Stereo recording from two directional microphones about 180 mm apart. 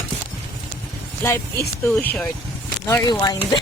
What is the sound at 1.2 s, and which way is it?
Speech, 15° left (ahead or behind).